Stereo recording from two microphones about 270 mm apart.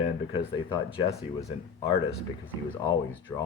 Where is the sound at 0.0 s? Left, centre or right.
Centre.